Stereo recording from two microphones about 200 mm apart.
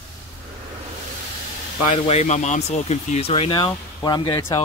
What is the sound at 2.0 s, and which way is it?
Speech, 35° left (ahead or behind).